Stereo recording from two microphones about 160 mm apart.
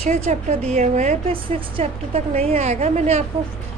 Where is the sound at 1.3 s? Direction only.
35° right (ahead or behind).